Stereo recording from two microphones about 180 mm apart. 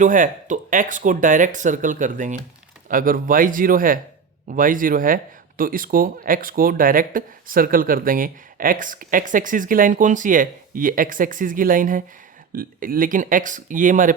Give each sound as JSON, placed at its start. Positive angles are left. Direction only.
{"t": 0.0, "sound": "speech", "side_deg": -45}